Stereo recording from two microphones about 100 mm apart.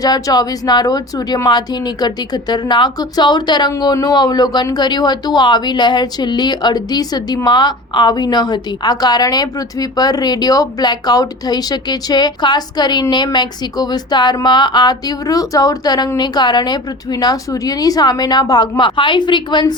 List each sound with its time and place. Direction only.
0.0 s a woman's voice: 40° left (ahead or behind)